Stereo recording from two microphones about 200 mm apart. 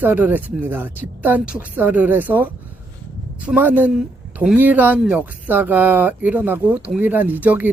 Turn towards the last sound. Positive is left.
turn(degrees=-10)  # may be behind; listen again after turning